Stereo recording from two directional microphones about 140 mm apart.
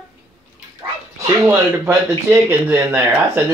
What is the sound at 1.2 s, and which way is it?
Speech, 20° right (ahead or behind).